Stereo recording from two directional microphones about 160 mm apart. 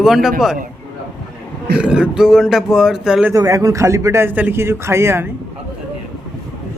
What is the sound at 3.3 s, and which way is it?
Speech, 20° right (ahead or behind).